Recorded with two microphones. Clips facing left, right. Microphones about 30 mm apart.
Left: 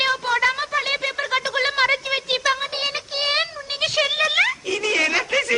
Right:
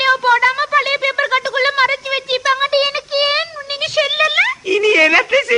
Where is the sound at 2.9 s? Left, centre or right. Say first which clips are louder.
Right 8 dB; right.